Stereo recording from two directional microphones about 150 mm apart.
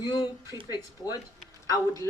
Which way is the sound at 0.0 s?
30° left (ahead or behind).